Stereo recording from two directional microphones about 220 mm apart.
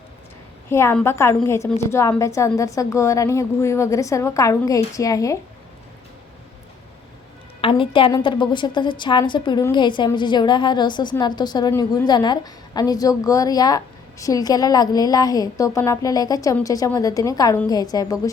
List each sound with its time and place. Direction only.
0.7 s a woman's voice: 10° left (ahead or behind)
7.6 s a woman's voice: 25° left (ahead or behind)